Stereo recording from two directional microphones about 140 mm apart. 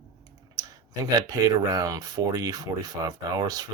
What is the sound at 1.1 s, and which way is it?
Speech, 25° right (ahead or behind).